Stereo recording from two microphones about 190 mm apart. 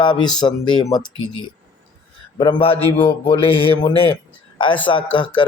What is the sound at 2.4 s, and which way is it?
Speech, 25° left (ahead or behind).